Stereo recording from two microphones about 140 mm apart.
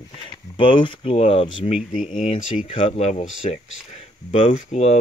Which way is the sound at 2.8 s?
45° left (ahead or behind).